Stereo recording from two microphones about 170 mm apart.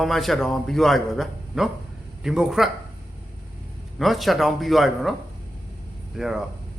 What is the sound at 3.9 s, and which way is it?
A man's voice, centre (ahead or behind).